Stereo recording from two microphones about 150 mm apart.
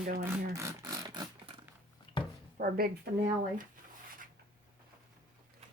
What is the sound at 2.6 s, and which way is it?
Speech, 85° right.